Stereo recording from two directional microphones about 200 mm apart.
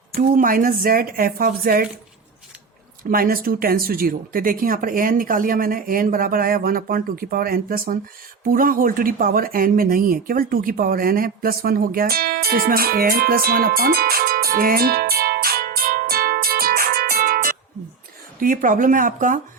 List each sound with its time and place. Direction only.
0.2 s speech: 45° right (ahead or behind)
3.0 s speech: 45° right (ahead or behind)